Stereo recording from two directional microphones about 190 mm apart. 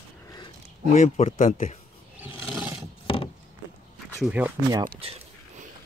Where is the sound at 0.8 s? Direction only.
35° left (ahead or behind).